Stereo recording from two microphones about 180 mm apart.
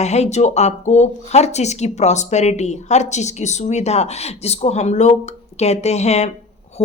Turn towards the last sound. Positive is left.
turn(degrees=35)  # may be behind; listen again after turning